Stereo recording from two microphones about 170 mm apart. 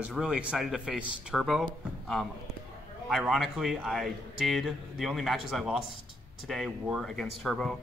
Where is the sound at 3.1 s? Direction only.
Centre (ahead or behind).